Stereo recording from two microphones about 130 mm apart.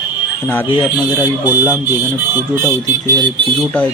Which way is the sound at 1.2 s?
15° right (ahead or behind).